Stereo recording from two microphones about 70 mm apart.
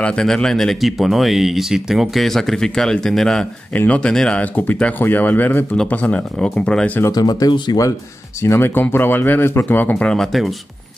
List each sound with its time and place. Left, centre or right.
0.0 s speech: centre
3.7 s speech: centre
7.1 s speech: left
8.4 s speech: left
9.7 s speech: left
10.1 s speech: centre